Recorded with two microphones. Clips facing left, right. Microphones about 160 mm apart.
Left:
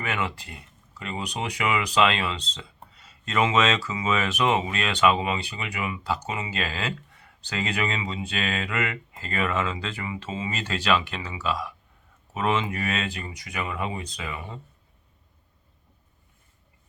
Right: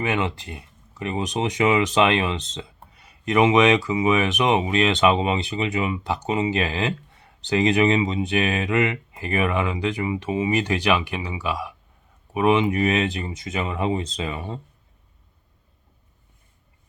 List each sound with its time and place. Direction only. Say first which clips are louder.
0.0 s speech: right 5 dB; 20° right (ahead or behind)